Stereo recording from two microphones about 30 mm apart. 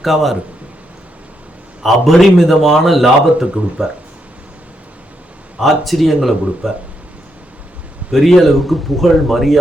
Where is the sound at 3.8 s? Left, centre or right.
Right.